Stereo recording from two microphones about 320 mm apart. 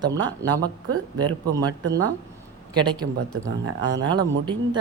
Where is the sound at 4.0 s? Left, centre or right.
Centre.